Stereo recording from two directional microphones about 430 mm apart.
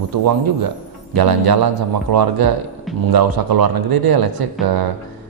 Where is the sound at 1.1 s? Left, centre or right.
Right.